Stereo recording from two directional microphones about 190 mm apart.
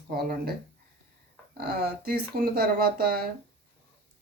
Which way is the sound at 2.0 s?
55° right (ahead or behind).